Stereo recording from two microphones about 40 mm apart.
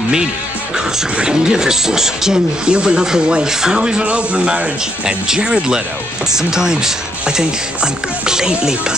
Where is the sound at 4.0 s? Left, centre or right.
Right.